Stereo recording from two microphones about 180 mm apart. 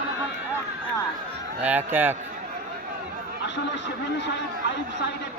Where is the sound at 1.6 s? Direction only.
10° right (ahead or behind).